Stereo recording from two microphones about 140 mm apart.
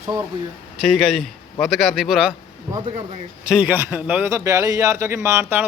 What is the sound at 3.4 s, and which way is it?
A man's voice, 5° right (ahead or behind).